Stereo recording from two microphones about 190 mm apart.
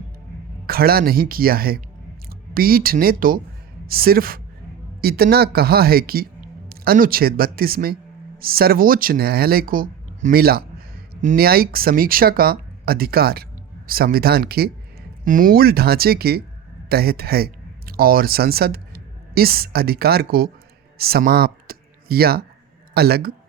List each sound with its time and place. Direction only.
0.7 s speech: 50° right (ahead or behind)